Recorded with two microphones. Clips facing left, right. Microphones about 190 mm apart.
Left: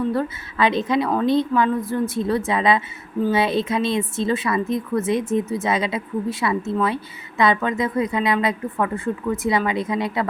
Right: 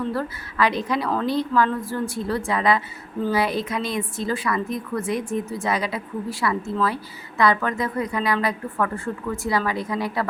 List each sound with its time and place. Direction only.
0.1 s a woman's voice: 20° left (ahead or behind)